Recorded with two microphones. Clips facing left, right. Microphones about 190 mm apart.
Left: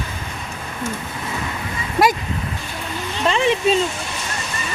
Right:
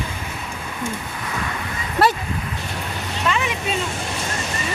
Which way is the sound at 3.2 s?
30° left (ahead or behind).